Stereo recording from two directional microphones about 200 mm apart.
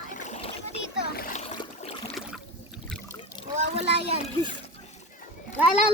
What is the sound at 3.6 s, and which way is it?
Speech, 30° right (ahead or behind).